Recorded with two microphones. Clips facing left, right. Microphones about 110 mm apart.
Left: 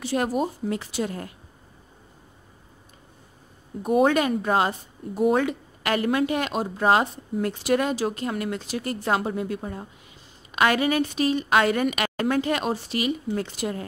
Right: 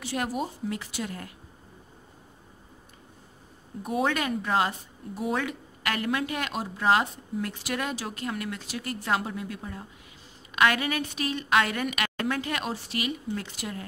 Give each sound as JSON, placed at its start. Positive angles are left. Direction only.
{"t": 0.0, "sound": "a woman's voice", "side_deg": 30}
{"t": 4.1, "sound": "a woman's voice", "side_deg": 25}